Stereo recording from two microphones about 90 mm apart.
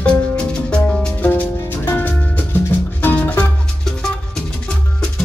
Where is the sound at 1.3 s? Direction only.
20° left (ahead or behind).